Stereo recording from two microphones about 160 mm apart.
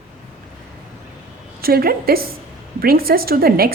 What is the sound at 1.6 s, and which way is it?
A woman's voice, 70° right (ahead or behind).